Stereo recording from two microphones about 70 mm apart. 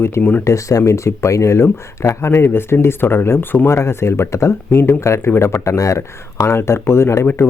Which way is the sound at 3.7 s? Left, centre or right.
Left.